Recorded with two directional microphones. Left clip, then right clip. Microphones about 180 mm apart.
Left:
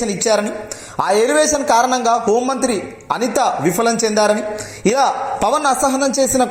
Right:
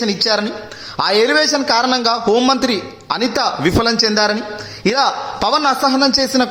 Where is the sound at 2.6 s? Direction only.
15° right (ahead or behind).